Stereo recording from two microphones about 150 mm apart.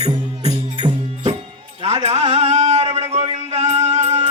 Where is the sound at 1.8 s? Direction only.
45° right (ahead or behind).